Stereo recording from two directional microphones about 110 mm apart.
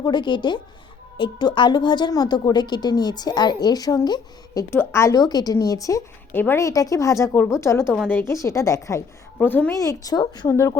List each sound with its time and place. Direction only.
0.0 s a woman's voice: 45° left (ahead or behind)
4.7 s a woman's voice: 20° left (ahead or behind)
6.3 s a woman's voice: 20° left (ahead or behind)
9.4 s a woman's voice: 15° left (ahead or behind)
9.7 s a woman's voice: 30° left (ahead or behind)
10.5 s a woman's voice: 25° left (ahead or behind)